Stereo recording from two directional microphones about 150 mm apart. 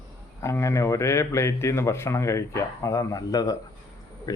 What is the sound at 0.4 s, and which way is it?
A man's voice, 20° left (ahead or behind).